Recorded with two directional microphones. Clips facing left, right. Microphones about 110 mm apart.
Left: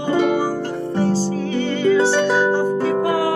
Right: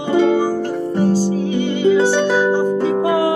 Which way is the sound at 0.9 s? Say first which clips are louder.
Right 3 dB; 15° right (ahead or behind).